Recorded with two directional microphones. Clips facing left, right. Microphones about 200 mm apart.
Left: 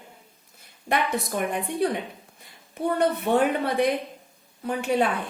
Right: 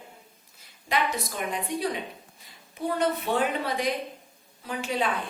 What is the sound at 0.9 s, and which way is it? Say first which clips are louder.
Speech: left 3 dB; 60° left (ahead or behind).